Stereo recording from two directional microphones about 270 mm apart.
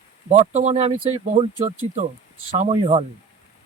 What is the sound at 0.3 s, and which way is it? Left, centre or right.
Speech, right.